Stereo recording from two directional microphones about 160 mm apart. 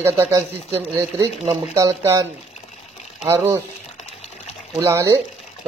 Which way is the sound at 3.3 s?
15° right (ahead or behind).